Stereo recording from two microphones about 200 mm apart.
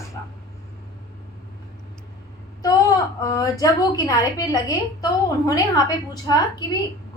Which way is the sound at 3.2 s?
20° left (ahead or behind).